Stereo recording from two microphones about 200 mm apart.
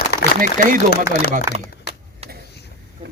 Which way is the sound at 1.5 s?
15° right (ahead or behind).